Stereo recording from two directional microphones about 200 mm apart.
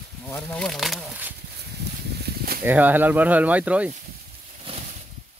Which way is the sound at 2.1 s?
50° right (ahead or behind).